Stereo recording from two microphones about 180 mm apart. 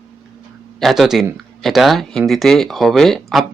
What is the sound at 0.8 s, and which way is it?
Speech, centre (ahead or behind).